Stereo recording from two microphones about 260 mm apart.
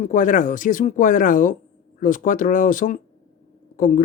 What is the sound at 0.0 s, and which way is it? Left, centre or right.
Speech, left.